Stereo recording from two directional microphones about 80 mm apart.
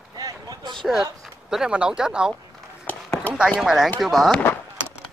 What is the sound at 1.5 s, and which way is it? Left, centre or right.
Speech, centre.